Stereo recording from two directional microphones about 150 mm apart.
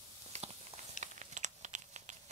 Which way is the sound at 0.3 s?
50° right (ahead or behind).